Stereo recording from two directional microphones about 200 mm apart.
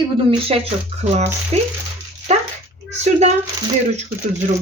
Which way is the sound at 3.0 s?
35° right (ahead or behind).